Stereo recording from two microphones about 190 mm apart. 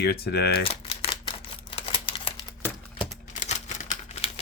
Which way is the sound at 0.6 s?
30° left (ahead or behind).